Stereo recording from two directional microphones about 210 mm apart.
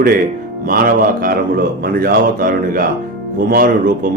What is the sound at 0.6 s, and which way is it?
A man's voice, 45° right (ahead or behind).